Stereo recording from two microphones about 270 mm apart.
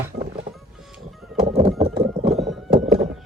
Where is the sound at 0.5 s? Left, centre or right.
Centre.